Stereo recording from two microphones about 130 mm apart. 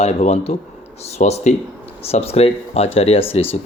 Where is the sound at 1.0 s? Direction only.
55° left (ahead or behind).